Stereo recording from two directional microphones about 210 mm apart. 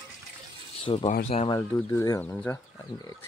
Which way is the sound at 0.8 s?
25° left (ahead or behind).